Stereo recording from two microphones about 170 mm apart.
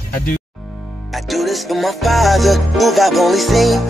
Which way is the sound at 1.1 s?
Centre (ahead or behind).